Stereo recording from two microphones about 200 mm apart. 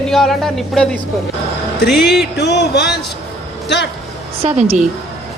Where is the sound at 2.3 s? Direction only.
55° left (ahead or behind).